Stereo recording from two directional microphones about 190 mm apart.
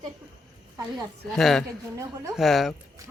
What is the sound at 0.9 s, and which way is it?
Speech, centre (ahead or behind).